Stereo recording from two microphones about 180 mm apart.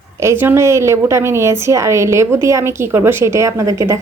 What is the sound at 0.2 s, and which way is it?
A woman's voice, 15° right (ahead or behind).